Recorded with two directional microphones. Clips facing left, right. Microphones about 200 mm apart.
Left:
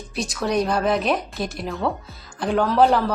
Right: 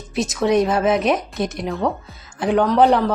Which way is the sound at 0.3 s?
Centre (ahead or behind).